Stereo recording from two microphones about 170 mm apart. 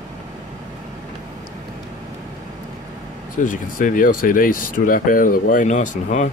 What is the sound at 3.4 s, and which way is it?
Speech, 50° left (ahead or behind).